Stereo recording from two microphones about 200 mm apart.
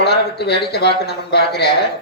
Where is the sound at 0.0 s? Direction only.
55° left (ahead or behind).